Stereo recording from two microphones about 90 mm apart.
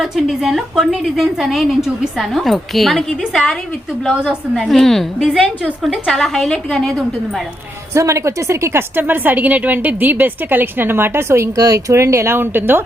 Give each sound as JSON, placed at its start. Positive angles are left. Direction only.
{"t": 0.0, "sound": "a woman's voice", "side_deg": -5}
{"t": 4.0, "sound": "a woman's voice", "side_deg": -10}
{"t": 4.5, "sound": "a woman's voice", "side_deg": 0}
{"t": 7.9, "sound": "a woman's voice", "side_deg": -35}